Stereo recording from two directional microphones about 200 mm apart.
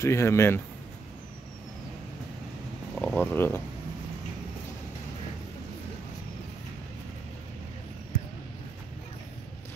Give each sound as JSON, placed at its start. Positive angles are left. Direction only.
{"t": 0.0, "sound": "speech", "side_deg": 15}
{"t": 3.0, "sound": "speech", "side_deg": 10}